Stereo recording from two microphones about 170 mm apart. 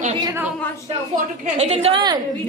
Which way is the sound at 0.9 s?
40° right (ahead or behind).